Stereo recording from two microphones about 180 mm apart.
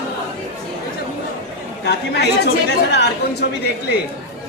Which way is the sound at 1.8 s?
65° left (ahead or behind).